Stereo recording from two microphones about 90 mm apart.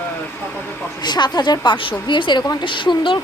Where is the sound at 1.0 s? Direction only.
50° left (ahead or behind).